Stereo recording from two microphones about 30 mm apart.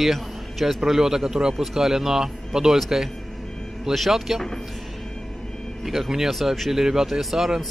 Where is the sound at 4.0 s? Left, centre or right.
Centre.